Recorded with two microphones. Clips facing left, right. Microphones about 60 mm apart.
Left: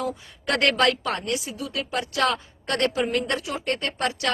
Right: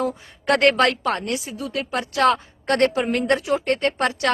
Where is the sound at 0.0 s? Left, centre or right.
Right.